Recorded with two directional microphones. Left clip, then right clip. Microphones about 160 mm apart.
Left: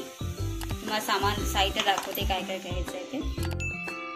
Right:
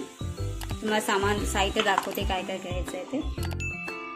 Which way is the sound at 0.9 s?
50° right (ahead or behind).